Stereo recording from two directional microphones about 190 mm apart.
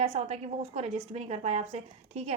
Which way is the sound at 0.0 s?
35° right (ahead or behind).